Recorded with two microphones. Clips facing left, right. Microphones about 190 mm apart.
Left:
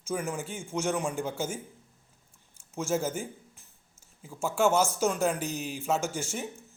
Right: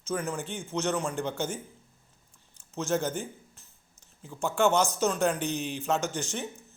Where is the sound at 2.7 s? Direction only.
10° left (ahead or behind).